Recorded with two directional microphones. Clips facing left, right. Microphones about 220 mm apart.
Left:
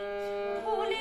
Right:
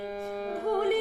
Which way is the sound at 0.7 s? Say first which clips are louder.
Right 7 dB; 50° right (ahead or behind).